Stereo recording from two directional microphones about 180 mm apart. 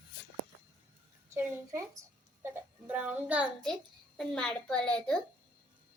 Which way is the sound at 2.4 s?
10° right (ahead or behind).